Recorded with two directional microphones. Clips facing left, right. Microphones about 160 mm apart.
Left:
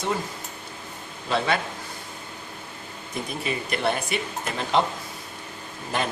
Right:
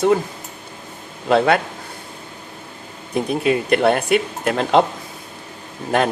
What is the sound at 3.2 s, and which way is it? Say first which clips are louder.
Speech: right 11 dB; 65° right (ahead or behind).